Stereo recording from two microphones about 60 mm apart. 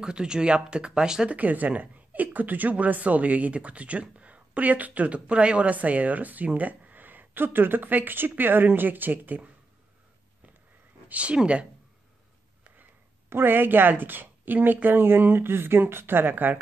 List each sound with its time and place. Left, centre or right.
0.0 s speech: centre
1.3 s a woman's voice: right
11.1 s a woman's voice: right
13.3 s a woman's voice: right